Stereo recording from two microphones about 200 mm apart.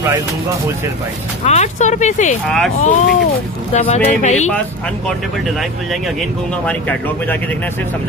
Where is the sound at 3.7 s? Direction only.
40° left (ahead or behind).